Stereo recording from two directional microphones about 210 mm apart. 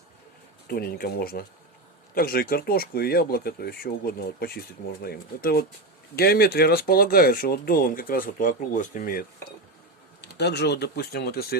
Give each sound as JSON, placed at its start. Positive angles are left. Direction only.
{"t": 0.7, "sound": "speech", "side_deg": 45}
{"t": 10.2, "sound": "speech", "side_deg": 50}